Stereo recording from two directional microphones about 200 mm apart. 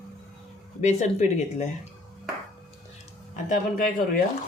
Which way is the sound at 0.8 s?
35° left (ahead or behind).